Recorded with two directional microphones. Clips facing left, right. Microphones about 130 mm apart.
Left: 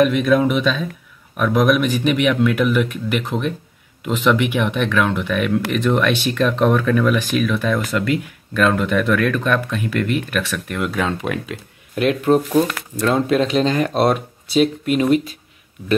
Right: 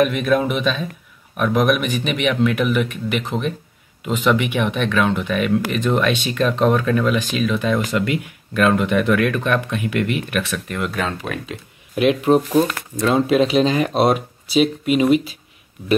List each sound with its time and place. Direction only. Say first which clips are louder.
0.0 s speech: left 2 dB; centre (ahead or behind)
11.9 s speech: right 1 dB; 5° right (ahead or behind)